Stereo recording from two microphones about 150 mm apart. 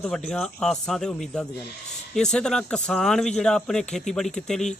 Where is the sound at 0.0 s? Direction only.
5° left (ahead or behind).